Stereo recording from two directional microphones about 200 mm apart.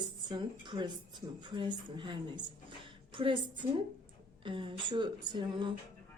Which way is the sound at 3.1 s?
25° right (ahead or behind).